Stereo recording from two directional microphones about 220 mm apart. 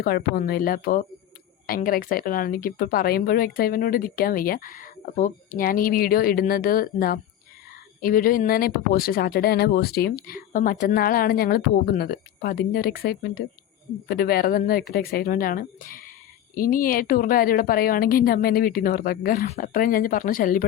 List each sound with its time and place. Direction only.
0.0 s a woman's voice: 45° left (ahead or behind)